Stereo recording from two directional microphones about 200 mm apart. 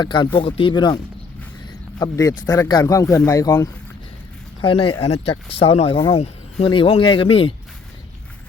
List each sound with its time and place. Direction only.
0.0 s speech: 20° left (ahead or behind)
1.6 s a sound: 20° left (ahead or behind)
2.5 s speech: 20° left (ahead or behind)
4.6 s speech: 25° left (ahead or behind)